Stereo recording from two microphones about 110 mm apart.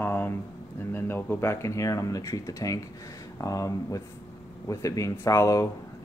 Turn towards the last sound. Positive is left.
turn(degrees=30)  # may be behind; listen again after turning